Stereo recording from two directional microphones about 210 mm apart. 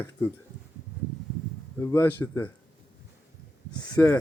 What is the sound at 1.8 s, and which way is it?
Speech, 15° left (ahead or behind).